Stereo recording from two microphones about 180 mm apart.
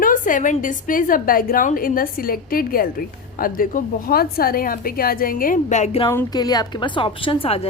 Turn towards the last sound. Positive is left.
turn(degrees=35)  # may be behind; listen again after turning